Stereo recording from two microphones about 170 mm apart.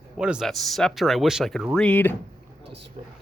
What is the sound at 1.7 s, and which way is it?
Speech, 10° left (ahead or behind).